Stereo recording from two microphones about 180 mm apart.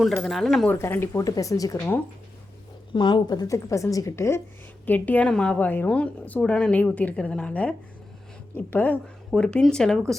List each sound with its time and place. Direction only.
0.0 s a woman's voice: centre (ahead or behind)
0.8 s a woman's voice: 15° left (ahead or behind)
2.9 s a woman's voice: 25° left (ahead or behind); by 10.0 s 5° left (ahead or behind)